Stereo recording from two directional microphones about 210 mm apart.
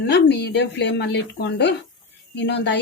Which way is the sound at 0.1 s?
55° left (ahead or behind).